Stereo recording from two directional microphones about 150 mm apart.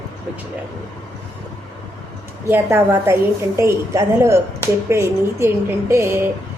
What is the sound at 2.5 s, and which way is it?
A woman's voice, 15° right (ahead or behind).